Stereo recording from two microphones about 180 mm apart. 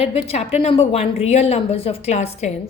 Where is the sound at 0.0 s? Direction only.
35° left (ahead or behind).